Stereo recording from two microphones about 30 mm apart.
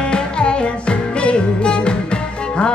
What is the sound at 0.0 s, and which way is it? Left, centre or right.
Music, left.